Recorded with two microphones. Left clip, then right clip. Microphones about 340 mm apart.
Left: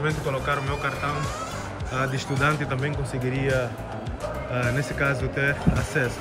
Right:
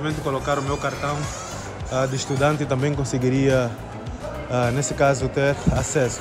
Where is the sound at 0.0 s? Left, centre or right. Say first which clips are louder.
Right 1 dB; centre.